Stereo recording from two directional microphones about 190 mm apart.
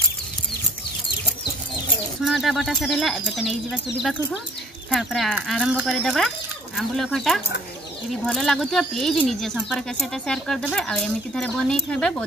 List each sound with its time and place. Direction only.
2.2 s speech: centre (ahead or behind)
4.9 s speech: centre (ahead or behind)